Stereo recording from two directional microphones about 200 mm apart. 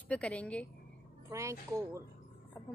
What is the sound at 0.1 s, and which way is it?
Speech, 5° left (ahead or behind).